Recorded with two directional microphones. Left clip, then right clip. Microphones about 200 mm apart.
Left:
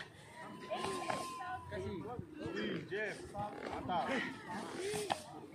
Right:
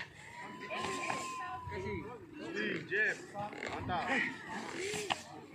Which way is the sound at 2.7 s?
65° left (ahead or behind).